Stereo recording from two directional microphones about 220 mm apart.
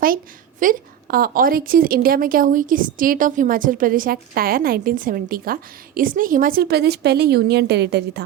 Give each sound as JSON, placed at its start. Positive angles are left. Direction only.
{"t": 0.6, "sound": "a woman's voice", "side_deg": -40}